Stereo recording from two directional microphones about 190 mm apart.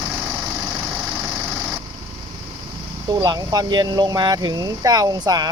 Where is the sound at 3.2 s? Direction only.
20° right (ahead or behind).